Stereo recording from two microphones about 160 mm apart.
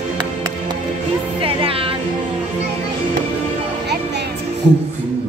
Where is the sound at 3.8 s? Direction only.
90° right.